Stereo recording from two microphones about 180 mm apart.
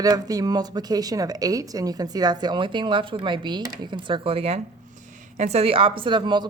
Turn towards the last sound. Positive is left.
turn(degrees=-25)  # may be behind; listen again after turning